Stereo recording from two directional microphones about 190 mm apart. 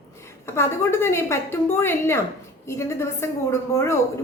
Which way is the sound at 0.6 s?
15° left (ahead or behind).